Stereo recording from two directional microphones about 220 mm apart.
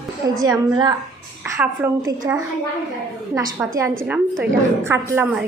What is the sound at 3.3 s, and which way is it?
A woman's voice, 15° right (ahead or behind).